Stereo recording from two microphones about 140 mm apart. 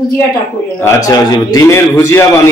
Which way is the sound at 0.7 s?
20° left (ahead or behind).